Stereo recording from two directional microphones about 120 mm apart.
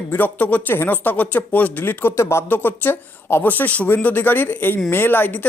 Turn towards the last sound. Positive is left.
turn(degrees=15)  # may be behind; listen again after turning